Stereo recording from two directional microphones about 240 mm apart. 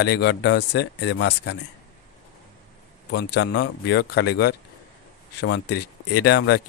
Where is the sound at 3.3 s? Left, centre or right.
Left.